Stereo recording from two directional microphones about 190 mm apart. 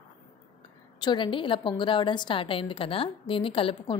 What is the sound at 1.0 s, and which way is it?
A woman's voice, 25° left (ahead or behind).